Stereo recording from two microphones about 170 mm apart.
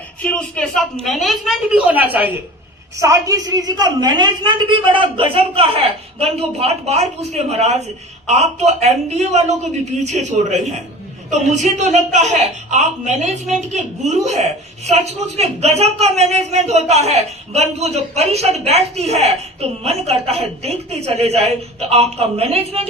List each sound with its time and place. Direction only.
0.2 s a woman's voice: 5° left (ahead or behind); by 22.9 s 35° right (ahead or behind)